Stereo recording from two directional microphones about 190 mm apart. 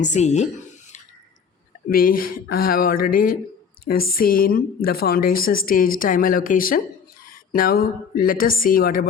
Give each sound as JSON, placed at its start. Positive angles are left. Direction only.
{"t": 0.0, "sound": "speech", "side_deg": 40}
{"t": 1.9, "sound": "a woman's voice", "side_deg": 50}